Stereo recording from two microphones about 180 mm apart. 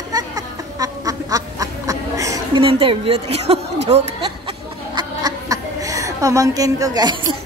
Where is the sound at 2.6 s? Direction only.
30° right (ahead or behind).